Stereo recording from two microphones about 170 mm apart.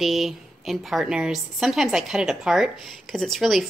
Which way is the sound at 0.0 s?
Centre (ahead or behind).